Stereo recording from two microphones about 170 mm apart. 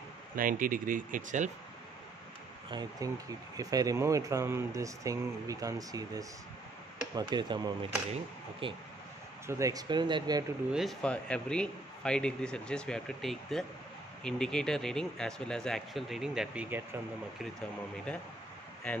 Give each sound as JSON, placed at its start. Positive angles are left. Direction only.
{"t": 0.4, "sound": "speech", "side_deg": -55}
{"t": 2.7, "sound": "speech", "side_deg": -25}
{"t": 9.5, "sound": "speech", "side_deg": -20}
{"t": 10.7, "sound": "speech", "side_deg": 0}
{"t": 17.6, "sound": "speech", "side_deg": 5}